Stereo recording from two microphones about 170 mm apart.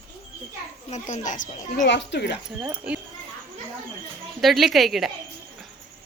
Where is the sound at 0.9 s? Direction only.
45° left (ahead or behind).